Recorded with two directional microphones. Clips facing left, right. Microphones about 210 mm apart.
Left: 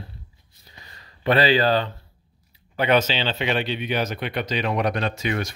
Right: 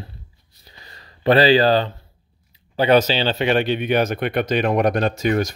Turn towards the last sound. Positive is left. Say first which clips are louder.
# right 6 dB
turn(degrees=-45)  # may be behind; listen again after turning